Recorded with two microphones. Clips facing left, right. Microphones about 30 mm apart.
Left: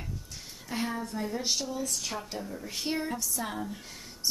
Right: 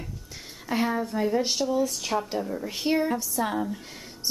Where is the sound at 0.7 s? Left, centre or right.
Centre.